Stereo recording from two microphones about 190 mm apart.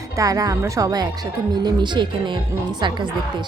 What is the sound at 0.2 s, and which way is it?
A woman's voice, 20° right (ahead or behind).